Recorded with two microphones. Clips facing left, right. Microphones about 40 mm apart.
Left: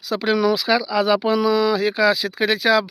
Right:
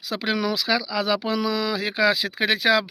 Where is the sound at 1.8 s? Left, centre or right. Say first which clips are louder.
Left 3 dB; right.